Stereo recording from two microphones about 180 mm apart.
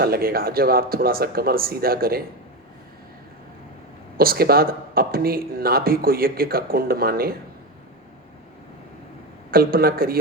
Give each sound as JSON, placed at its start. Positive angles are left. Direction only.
{"t": 0.0, "sound": "speech", "side_deg": -55}
{"t": 4.2, "sound": "speech", "side_deg": -55}
{"t": 9.5, "sound": "speech", "side_deg": -55}